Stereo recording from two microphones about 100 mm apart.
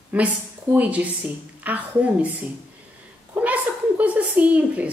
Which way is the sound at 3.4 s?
15° right (ahead or behind).